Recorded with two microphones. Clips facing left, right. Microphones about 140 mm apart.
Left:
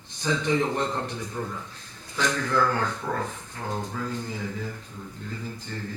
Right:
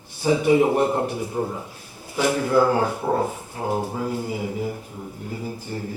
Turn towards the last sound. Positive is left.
turn(degrees=-10)  # may be behind; listen again after turning